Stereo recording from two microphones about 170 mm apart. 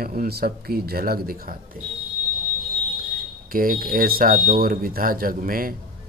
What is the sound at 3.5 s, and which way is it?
A man's voice, 55° right (ahead or behind).